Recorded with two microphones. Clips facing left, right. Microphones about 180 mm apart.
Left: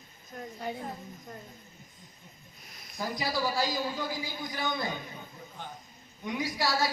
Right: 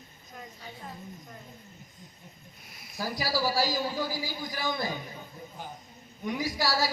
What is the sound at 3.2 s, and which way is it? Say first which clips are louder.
A man's voice: right 2 dB; 20° left (ahead or behind).